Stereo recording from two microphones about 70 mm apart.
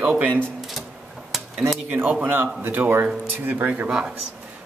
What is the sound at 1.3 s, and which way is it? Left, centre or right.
Dishes, centre.